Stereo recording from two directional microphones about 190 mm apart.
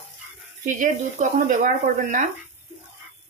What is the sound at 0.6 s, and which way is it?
Speech, 40° right (ahead or behind).